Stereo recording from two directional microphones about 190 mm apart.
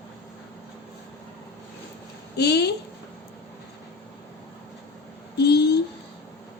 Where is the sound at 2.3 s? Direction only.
60° left (ahead or behind).